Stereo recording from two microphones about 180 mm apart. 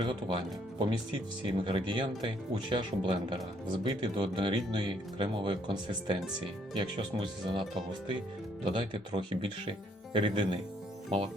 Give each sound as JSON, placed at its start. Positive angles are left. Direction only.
{"t": 0.0, "sound": "speech", "side_deg": -30}
{"t": 8.7, "sound": "speech", "side_deg": -25}